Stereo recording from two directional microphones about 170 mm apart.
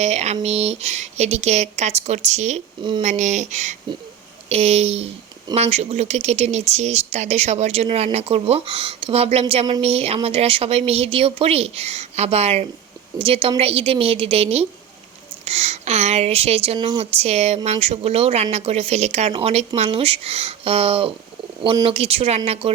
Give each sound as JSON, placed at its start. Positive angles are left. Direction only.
{"t": 0.0, "sound": "speech", "side_deg": -40}